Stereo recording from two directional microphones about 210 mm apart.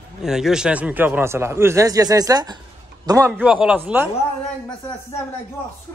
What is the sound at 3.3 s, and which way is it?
Speech, 5° right (ahead or behind).